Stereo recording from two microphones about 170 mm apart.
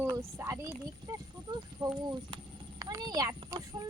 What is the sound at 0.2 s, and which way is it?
Speech, 15° right (ahead or behind).